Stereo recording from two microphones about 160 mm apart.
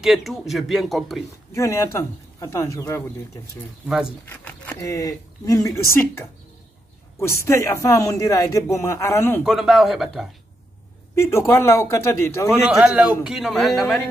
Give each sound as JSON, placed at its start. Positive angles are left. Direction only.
{"t": 0.0, "sound": "a man's voice", "side_deg": 0}
{"t": 1.5, "sound": "speech", "side_deg": 20}
{"t": 3.8, "sound": "a man's voice", "side_deg": -5}
{"t": 4.3, "sound": "speech", "side_deg": 15}
{"t": 9.4, "sound": "a man's voice", "side_deg": -5}
{"t": 11.1, "sound": "speech", "side_deg": 15}
{"t": 12.4, "sound": "a man's voice", "side_deg": -5}